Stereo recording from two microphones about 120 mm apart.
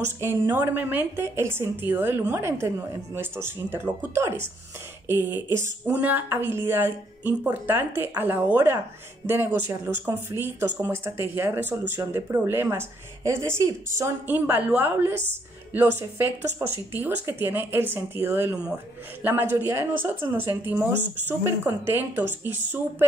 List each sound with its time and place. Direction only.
0.0 s a woman's voice: 20° right (ahead or behind)